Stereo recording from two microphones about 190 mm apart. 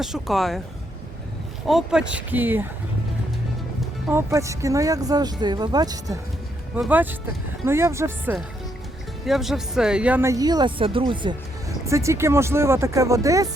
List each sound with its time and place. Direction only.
0.0 s speech: centre (ahead or behind)
1.6 s speech: centre (ahead or behind)
4.1 s speech: 15° right (ahead or behind)
6.7 s speech: 5° right (ahead or behind)
9.2 s speech: centre (ahead or behind); by 13.5 s 15° right (ahead or behind)